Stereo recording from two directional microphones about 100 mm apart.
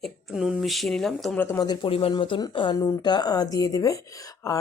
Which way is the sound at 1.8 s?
70° left (ahead or behind).